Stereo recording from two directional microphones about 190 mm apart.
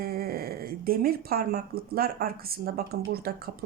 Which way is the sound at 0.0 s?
50° right (ahead or behind).